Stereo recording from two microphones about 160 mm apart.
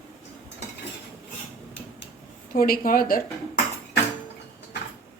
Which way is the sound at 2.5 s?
65° left (ahead or behind).